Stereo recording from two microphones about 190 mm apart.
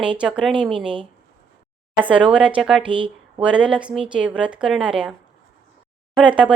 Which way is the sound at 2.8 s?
25° right (ahead or behind).